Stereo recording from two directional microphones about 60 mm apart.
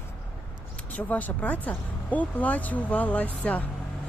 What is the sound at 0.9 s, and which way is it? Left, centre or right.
Speech, left.